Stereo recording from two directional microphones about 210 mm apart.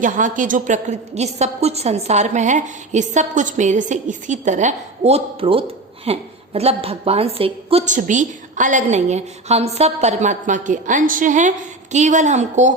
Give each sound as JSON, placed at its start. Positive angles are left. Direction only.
{"t": 0.0, "sound": "a woman's voice", "side_deg": -40}